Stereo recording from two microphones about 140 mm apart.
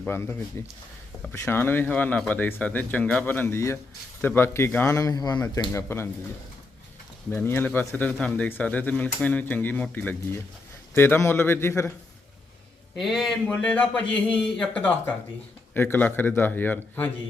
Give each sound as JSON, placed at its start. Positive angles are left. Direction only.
{"t": 0.0, "sound": "speech", "side_deg": 15}
{"t": 7.3, "sound": "speech", "side_deg": 15}
{"t": 13.0, "sound": "a man's voice", "side_deg": 0}